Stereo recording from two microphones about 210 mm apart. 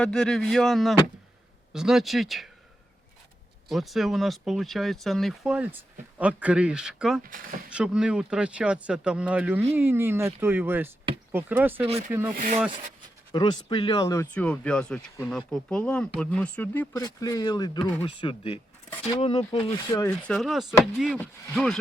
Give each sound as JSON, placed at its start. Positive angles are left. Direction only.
{"t": 0.0, "sound": "speech", "side_deg": 5}
{"t": 3.7, "sound": "speech", "side_deg": 0}
{"t": 7.2, "sound": "speech", "side_deg": -40}
{"t": 7.7, "sound": "speech", "side_deg": -5}
{"t": 11.9, "sound": "speech", "side_deg": -30}
{"t": 13.3, "sound": "speech", "side_deg": 20}
{"t": 19.6, "sound": "speech", "side_deg": 10}